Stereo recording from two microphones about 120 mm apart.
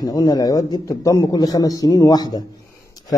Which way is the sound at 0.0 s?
35° left (ahead or behind).